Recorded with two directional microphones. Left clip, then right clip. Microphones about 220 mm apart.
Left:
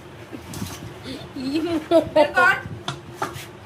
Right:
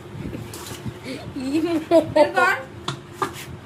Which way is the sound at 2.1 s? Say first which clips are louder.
Left 3 dB; 25° left (ahead or behind).